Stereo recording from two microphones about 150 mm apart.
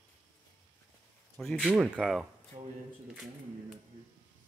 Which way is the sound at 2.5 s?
50° right (ahead or behind).